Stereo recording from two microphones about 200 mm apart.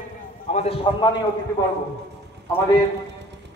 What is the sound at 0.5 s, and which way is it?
Speech, 30° left (ahead or behind).